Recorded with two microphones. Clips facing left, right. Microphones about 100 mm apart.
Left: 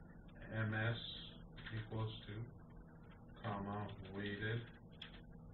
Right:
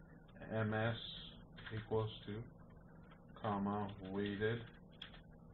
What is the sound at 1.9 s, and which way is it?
Speech, 45° right (ahead or behind).